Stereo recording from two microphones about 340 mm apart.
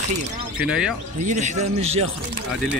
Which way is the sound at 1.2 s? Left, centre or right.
Right.